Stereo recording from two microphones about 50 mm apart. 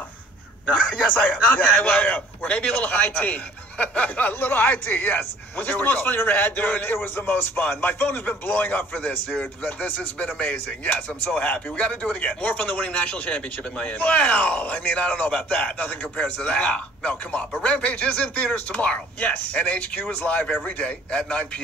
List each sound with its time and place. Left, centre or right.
0.7 s a man's voice: left
4.3 s speech: left; by 21.5 s centre